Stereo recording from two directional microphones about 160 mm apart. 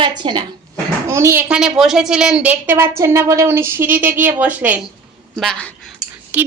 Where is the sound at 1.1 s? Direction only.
15° right (ahead or behind).